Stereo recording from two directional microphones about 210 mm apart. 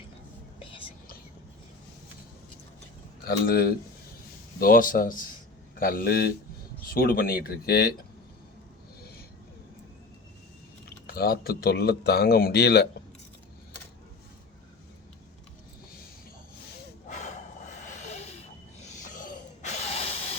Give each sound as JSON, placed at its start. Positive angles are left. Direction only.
{"t": 3.2, "sound": "speech", "side_deg": 45}
{"t": 10.8, "sound": "speech", "side_deg": 45}
{"t": 17.1, "sound": "a sound", "side_deg": 35}